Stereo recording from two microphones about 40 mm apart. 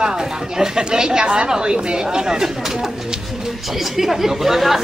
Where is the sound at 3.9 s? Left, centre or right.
Centre.